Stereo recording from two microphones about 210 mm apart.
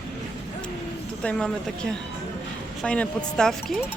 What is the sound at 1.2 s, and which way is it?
Speech, 5° left (ahead or behind).